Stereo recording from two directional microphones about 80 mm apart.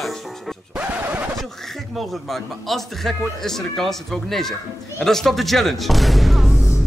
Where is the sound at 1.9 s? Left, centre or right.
Centre.